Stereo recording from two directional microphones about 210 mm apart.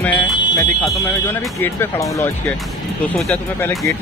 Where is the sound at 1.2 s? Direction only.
10° left (ahead or behind).